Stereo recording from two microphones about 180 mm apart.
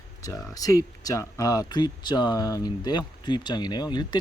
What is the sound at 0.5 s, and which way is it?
Speech, 20° left (ahead or behind).